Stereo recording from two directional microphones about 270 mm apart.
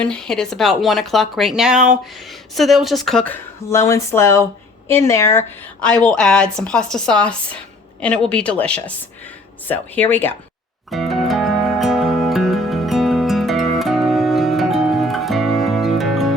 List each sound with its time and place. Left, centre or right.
0.0 s speech: centre
10.9 s music: centre